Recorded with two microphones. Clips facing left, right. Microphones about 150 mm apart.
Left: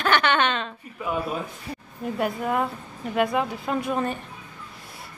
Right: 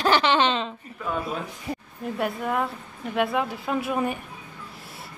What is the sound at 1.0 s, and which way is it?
Speech, 10° left (ahead or behind).